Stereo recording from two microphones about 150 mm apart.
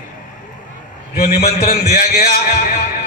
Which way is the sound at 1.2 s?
50° left (ahead or behind).